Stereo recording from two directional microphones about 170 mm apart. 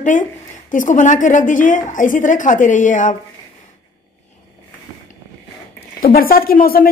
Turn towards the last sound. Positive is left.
turn(degrees=60)  # may be behind; listen again after turning